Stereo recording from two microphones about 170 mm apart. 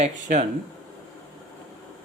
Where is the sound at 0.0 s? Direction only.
45° right (ahead or behind).